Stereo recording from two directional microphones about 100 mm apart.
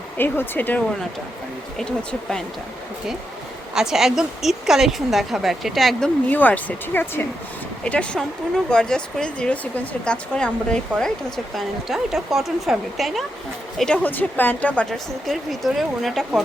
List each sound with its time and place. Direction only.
0.2 s speech: 20° left (ahead or behind)
3.8 s a woman's voice: 5° right (ahead or behind)
6.2 s speech: 15° left (ahead or behind)
7.9 s speech: 10° left (ahead or behind)
11.5 s a woman's voice: centre (ahead or behind)
13.7 s speech: 10° left (ahead or behind)
14.8 s a woman's voice: centre (ahead or behind)